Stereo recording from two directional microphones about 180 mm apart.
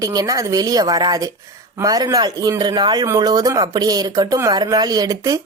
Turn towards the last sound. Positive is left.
turn(degrees=-20)  # may be behind; listen again after turning